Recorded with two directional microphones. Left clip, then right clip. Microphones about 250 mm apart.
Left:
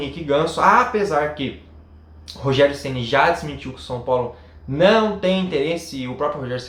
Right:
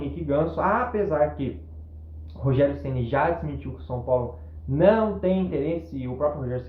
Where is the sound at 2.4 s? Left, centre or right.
Centre.